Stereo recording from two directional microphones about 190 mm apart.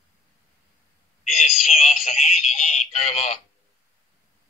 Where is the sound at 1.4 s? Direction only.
35° left (ahead or behind).